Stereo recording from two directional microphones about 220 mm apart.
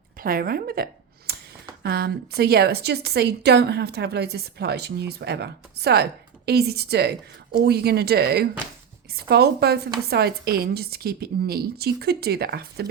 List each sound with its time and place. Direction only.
0.2 s a woman's voice: 40° right (ahead or behind)
1.3 s a sound: 45° right (ahead or behind)
1.8 s a woman's voice: 45° right (ahead or behind)